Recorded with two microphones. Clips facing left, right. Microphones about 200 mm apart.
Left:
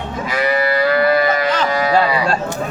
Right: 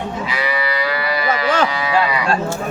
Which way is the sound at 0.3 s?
45° left (ahead or behind).